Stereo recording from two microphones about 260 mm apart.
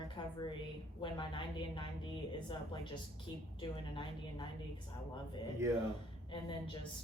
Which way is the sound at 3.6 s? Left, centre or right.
Centre.